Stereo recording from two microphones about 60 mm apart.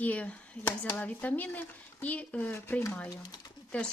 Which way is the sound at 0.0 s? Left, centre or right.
Left.